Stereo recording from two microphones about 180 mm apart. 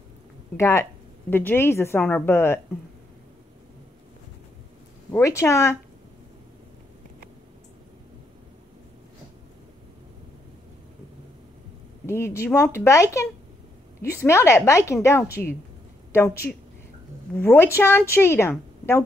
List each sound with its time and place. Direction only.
0.6 s a woman's voice: 15° left (ahead or behind)
5.1 s a woman's voice: 15° left (ahead or behind)
12.1 s a woman's voice: 15° left (ahead or behind)
17.4 s a woman's voice: 15° left (ahead or behind)